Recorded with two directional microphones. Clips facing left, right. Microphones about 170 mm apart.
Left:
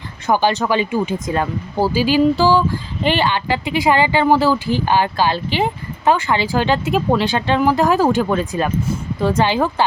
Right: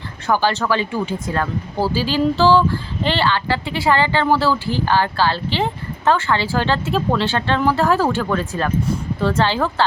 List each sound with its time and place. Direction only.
0.3 s speech: 15° left (ahead or behind)